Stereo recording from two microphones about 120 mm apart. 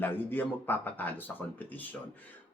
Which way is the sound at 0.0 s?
15° left (ahead or behind).